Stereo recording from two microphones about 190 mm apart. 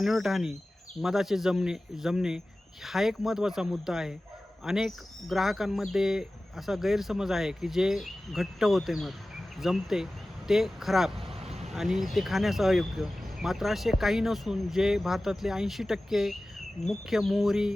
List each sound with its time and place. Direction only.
0.0 s speech: centre (ahead or behind)
11.3 s vehicle: 35° right (ahead or behind)
11.7 s speech: centre (ahead or behind)